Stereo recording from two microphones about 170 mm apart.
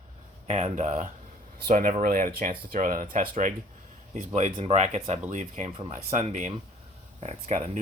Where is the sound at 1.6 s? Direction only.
55° right (ahead or behind).